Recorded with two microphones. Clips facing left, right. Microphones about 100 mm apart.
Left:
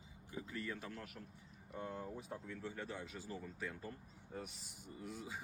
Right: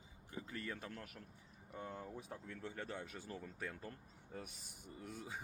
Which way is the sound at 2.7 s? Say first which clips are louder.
Even; 50° right (ahead or behind).